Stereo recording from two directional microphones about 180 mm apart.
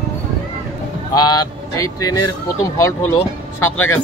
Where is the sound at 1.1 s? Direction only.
20° left (ahead or behind).